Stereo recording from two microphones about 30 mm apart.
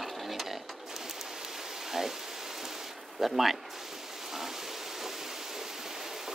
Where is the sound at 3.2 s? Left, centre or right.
Centre.